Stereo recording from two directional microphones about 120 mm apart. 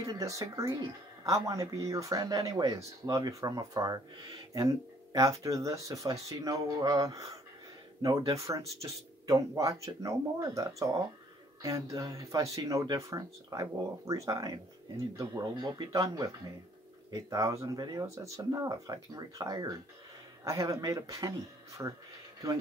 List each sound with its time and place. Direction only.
0.0 s speech: 30° right (ahead or behind)